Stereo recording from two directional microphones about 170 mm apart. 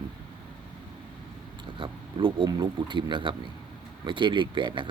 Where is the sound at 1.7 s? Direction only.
30° right (ahead or behind).